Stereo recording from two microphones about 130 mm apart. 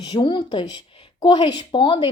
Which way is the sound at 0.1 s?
40° left (ahead or behind).